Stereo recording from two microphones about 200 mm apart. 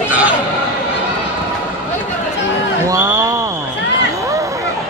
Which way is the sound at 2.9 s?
15° right (ahead or behind).